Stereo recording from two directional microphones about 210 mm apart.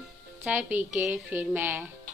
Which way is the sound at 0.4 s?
10° right (ahead or behind).